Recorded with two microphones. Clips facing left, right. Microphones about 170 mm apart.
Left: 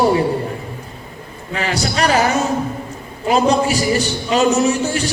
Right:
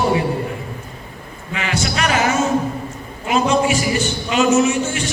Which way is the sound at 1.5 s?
35° left (ahead or behind).